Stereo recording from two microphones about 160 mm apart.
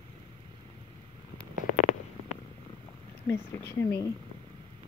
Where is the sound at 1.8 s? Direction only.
45° left (ahead or behind).